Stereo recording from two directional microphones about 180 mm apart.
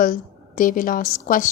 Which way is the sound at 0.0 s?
50° left (ahead or behind).